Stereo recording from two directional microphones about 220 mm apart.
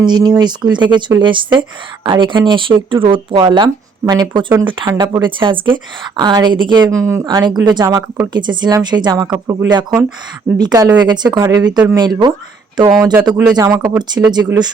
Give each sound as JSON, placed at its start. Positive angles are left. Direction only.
{"t": 0.0, "sound": "speech", "side_deg": -20}